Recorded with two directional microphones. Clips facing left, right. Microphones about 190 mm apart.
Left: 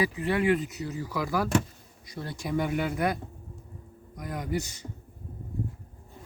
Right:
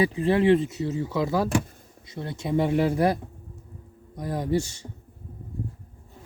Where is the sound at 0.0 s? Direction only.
25° right (ahead or behind).